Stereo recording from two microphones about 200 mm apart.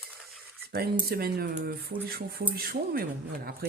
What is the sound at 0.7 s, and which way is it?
Speech, 50° right (ahead or behind).